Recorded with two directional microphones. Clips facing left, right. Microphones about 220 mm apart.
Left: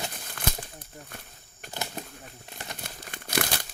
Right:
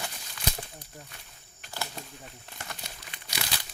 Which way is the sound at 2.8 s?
50° left (ahead or behind).